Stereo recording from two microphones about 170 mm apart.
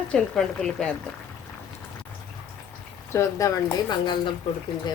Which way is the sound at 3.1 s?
15° left (ahead or behind).